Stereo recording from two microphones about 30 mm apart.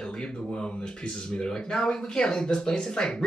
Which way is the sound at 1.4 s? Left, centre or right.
Left.